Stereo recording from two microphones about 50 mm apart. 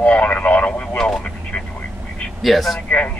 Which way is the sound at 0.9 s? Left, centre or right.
Centre.